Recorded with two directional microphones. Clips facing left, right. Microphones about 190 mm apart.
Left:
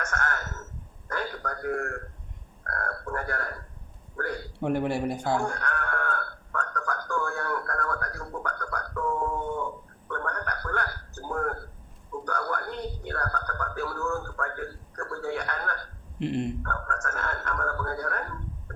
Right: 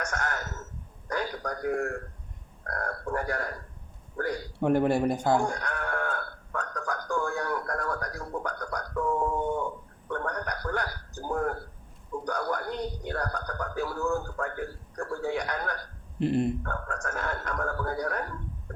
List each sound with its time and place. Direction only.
0.0 s speech: 15° right (ahead or behind)
1.0 s a sound: 15° right (ahead or behind)
2.6 s frog: 15° right (ahead or behind)
4.2 s a man's voice: 20° right (ahead or behind)
4.6 s speech: 45° right (ahead or behind)
5.4 s sheep: 15° right (ahead or behind)
10.1 s a sound: 15° right (ahead or behind)
16.2 s speech: 40° right (ahead or behind)
16.6 s speech: 15° right (ahead or behind)